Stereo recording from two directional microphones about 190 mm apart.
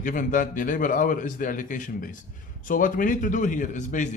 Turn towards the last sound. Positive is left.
turn(degrees=40)  # may be behind; listen again after turning